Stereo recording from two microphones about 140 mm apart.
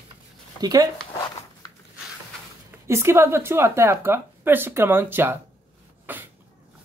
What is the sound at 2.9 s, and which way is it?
Speech, 20° right (ahead or behind).